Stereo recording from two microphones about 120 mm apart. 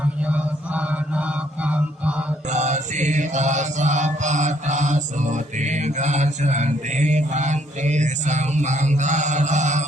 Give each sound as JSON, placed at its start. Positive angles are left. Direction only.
{"t": 0.0, "sound": "music", "side_deg": -10}
{"t": 2.5, "sound": "mantra", "side_deg": -80}